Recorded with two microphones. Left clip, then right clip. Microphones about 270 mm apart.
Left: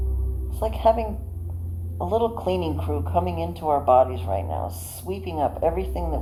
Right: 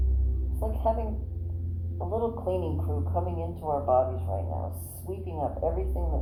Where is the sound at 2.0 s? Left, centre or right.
Left.